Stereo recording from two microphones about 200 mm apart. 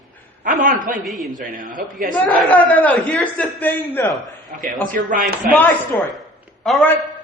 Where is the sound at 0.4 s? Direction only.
40° right (ahead or behind).